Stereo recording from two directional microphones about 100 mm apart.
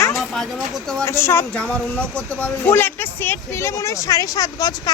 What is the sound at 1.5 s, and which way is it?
Speech, 10° left (ahead or behind).